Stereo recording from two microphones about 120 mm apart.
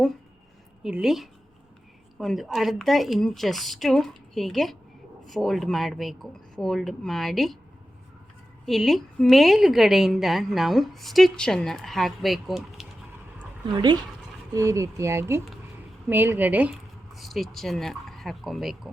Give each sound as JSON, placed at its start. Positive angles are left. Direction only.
{"t": 0.8, "sound": "a woman's voice", "side_deg": -5}
{"t": 8.6, "sound": "a woman's voice", "side_deg": 0}
{"t": 13.7, "sound": "speech", "side_deg": -35}
{"t": 14.5, "sound": "speech", "side_deg": -25}
{"t": 17.2, "sound": "speech", "side_deg": 0}